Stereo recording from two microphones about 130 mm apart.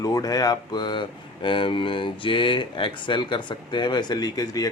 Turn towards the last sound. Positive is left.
turn(degrees=30)  # may be behind; listen again after turning